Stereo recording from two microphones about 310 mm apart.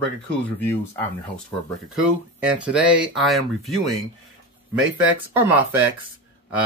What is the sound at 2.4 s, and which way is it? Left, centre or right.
Speech, centre.